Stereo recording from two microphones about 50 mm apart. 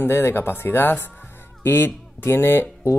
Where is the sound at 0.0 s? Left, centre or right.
Left.